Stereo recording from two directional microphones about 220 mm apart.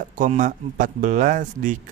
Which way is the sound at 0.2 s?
35° right (ahead or behind).